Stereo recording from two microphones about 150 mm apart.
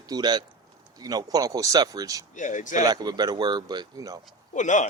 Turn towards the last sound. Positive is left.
turn(degrees=55)  # may be behind; listen again after turning